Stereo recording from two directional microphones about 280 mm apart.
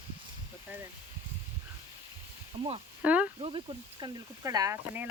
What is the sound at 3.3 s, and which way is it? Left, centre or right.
Speech, centre.